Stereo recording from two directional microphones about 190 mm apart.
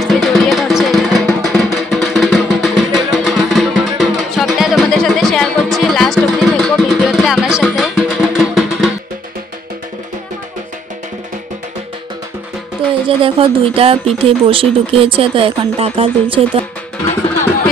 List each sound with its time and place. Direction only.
0.0 s music: centre (ahead or behind)
13.2 s speech: 30° right (ahead or behind)